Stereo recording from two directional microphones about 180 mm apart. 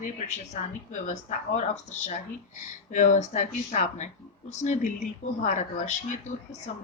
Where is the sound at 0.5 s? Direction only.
40° left (ahead or behind).